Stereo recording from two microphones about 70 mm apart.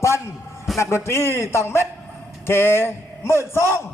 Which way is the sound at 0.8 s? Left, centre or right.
Left.